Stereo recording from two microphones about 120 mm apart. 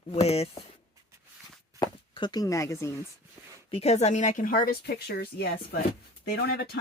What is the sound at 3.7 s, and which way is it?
Speech, 65° left (ahead or behind).